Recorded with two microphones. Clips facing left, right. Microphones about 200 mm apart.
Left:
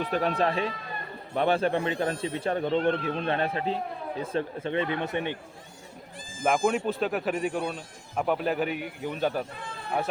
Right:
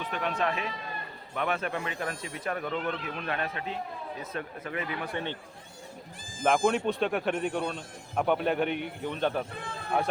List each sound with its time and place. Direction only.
0.0 s a man's voice: 35° left (ahead or behind); by 5.4 s 15° left (ahead or behind)
6.4 s speech: 5° left (ahead or behind)